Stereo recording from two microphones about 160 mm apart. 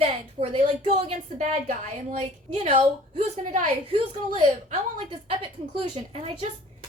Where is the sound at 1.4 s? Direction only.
50° right (ahead or behind).